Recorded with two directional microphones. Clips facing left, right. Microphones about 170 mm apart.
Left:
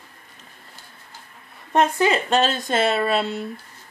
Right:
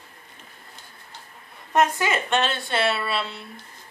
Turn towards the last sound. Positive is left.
turn(degrees=45)  # may be behind; listen again after turning